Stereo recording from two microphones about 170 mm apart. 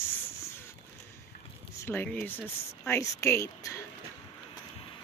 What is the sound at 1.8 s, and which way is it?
Speech, 15° left (ahead or behind).